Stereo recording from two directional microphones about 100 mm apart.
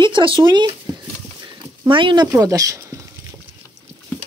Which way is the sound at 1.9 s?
55° right (ahead or behind).